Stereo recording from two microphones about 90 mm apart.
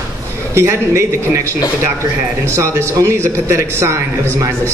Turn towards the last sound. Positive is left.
turn(degrees=-35)  # may be behind; listen again after turning